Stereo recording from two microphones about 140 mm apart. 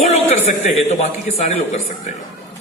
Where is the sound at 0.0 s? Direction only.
50° left (ahead or behind).